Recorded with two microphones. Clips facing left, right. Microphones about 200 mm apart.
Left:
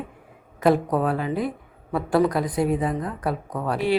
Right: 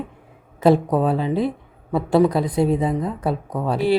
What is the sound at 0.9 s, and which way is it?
Speech, 25° right (ahead or behind).